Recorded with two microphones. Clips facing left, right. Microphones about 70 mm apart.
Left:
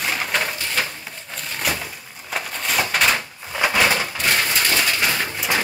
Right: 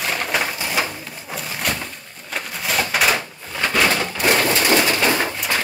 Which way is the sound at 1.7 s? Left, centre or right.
Centre.